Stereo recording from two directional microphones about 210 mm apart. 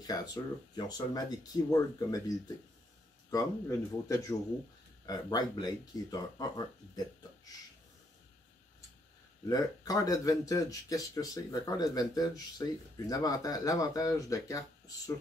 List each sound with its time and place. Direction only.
0.0 s speech: 20° left (ahead or behind)
9.5 s speech: 15° left (ahead or behind)